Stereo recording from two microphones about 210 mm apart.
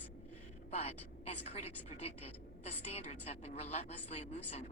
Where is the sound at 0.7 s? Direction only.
30° left (ahead or behind).